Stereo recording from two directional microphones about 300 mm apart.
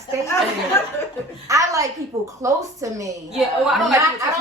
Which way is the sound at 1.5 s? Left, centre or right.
Centre.